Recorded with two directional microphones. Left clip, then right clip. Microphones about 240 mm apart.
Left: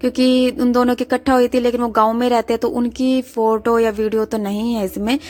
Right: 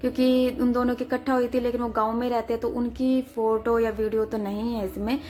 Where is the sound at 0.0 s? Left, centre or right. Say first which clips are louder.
Left 7 dB; left.